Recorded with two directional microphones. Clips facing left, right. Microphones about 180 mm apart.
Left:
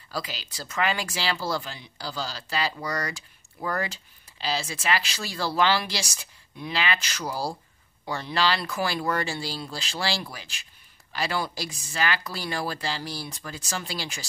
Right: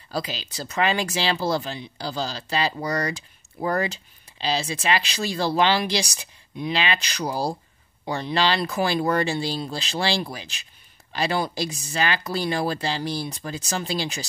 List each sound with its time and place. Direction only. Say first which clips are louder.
0.1 s speech: right 5 dB; 20° right (ahead or behind)